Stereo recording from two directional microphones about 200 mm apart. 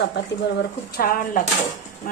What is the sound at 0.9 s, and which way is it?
Speech, 45° left (ahead or behind).